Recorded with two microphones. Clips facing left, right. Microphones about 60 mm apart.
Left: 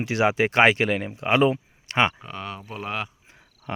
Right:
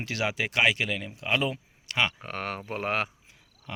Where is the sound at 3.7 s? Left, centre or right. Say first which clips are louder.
Left 8 dB; left.